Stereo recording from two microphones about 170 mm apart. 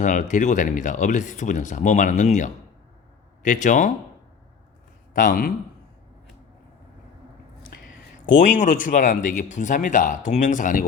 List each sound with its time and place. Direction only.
0.0 s speech: 50° left (ahead or behind)
5.1 s speech: 55° left (ahead or behind)
8.4 s speech: 50° left (ahead or behind)